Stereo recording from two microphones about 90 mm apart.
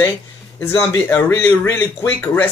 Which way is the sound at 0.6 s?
25° left (ahead or behind).